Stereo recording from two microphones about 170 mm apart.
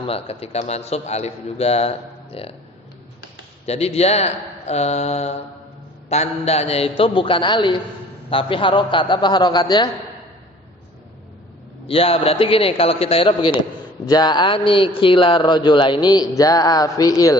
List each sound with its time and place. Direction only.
0.1 s a man's voice: 35° left (ahead or behind)
3.7 s a man's voice: 40° left (ahead or behind)
11.9 s a man's voice: 35° left (ahead or behind)